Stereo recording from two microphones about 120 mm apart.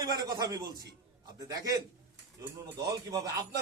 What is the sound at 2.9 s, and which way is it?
Speech, 30° right (ahead or behind).